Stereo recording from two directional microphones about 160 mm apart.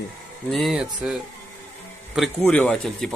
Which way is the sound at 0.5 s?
Centre (ahead or behind).